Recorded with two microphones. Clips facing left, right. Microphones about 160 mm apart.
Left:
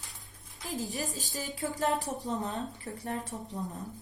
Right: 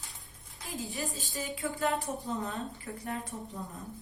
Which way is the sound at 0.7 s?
40° left (ahead or behind).